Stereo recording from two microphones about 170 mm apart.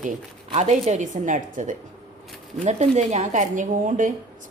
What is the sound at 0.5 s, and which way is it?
Speech, 40° right (ahead or behind).